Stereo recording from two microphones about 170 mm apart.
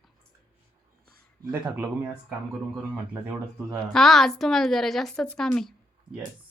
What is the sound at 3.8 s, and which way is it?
A woman's voice, 5° left (ahead or behind).